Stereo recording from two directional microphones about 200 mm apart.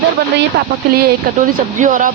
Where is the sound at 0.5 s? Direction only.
55° right (ahead or behind).